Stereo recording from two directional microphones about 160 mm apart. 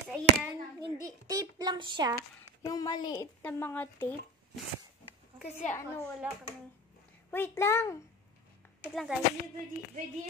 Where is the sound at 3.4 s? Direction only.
10° left (ahead or behind).